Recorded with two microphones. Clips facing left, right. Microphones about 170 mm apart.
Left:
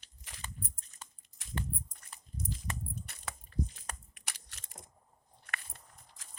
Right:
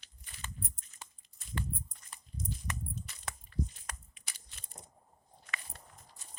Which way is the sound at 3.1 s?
60° left (ahead or behind).